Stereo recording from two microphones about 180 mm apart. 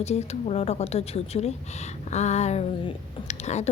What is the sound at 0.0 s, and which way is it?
A woman's voice, 35° left (ahead or behind).